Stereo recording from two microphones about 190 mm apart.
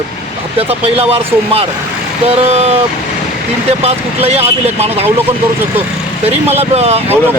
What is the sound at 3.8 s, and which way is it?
Speech, 35° right (ahead or behind).